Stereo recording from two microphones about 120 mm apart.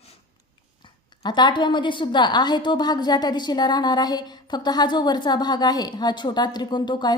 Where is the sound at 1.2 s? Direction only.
40° left (ahead or behind).